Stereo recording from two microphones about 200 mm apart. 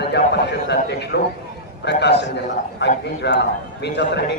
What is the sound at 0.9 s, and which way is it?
A man's voice, 55° left (ahead or behind).